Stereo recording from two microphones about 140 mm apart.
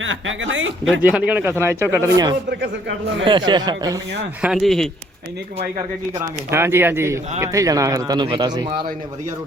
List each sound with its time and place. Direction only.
0.9 s speech: 5° right (ahead or behind)
3.2 s speech: 35° right (ahead or behind)
4.4 s speech: 5° right (ahead or behind)
6.5 s speech: 20° right (ahead or behind); by 8.9 s 35° right (ahead or behind)